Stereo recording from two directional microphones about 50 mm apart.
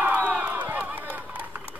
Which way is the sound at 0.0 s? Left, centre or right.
Right.